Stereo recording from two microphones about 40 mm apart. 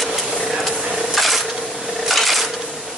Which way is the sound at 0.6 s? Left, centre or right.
Centre.